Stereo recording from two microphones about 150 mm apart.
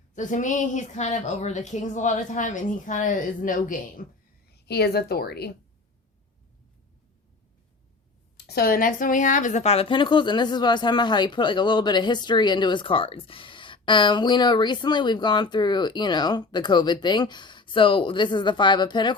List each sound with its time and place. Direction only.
0.1 s a woman's voice: 55° left (ahead or behind)
4.5 s a woman's voice: 90° left
8.4 s speech: 90° left; by 19.1 s 30° left (ahead or behind)